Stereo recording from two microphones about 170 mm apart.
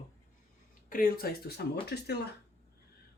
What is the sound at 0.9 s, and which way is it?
Speech, 60° left (ahead or behind).